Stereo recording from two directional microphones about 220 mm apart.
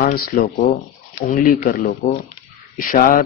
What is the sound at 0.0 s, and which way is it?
Speech, 40° left (ahead or behind).